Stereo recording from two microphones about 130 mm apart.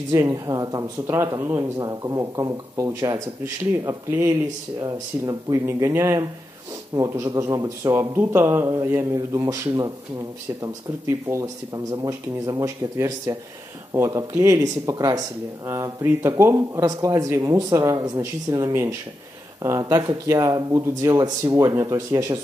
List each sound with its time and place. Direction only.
0.1 s speech: 25° right (ahead or behind)